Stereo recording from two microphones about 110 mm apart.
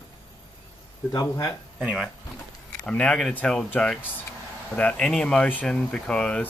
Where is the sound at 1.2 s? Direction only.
30° left (ahead or behind).